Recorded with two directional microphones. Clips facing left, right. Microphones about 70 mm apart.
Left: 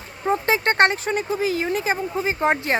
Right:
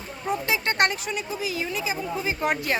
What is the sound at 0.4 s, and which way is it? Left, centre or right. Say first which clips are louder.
Speech: left 6 dB; left.